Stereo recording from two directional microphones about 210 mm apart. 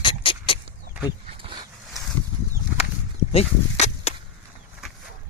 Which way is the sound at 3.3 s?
30° left (ahead or behind).